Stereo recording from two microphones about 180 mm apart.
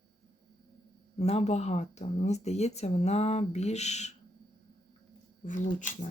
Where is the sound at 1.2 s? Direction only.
35° left (ahead or behind).